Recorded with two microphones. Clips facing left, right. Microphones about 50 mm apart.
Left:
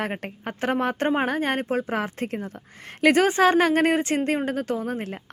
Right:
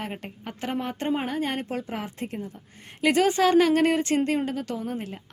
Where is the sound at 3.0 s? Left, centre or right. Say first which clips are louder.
Left 3 dB; left.